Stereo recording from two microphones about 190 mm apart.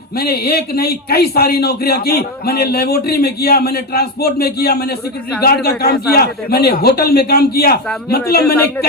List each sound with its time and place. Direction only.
0.2 s a man's voice: 55° left (ahead or behind)